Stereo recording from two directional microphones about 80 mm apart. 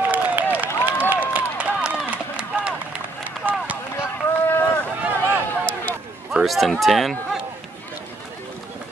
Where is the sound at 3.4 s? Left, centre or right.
Right.